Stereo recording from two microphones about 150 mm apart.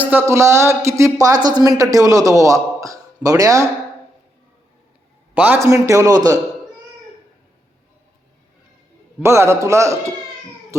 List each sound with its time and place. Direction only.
0.0 s a man's voice: 15° right (ahead or behind)
5.3 s a man's voice: 10° right (ahead or behind)
9.2 s a man's voice: 20° right (ahead or behind)